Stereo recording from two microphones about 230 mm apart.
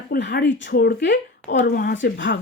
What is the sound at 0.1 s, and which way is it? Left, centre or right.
Speech, left.